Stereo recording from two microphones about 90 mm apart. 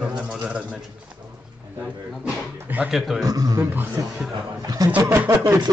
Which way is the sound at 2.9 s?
5° right (ahead or behind).